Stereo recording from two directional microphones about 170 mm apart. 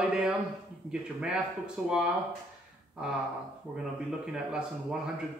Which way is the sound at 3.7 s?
5° right (ahead or behind).